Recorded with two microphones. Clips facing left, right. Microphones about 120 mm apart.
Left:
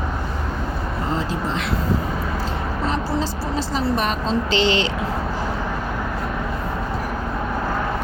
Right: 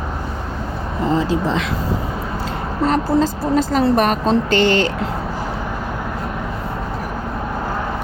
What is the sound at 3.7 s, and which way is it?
Speech, 50° right (ahead or behind).